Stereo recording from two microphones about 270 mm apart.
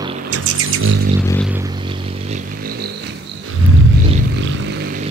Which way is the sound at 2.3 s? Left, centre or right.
Right.